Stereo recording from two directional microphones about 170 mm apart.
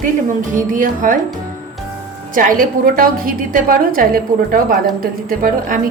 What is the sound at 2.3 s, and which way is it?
A woman's voice, 55° right (ahead or behind).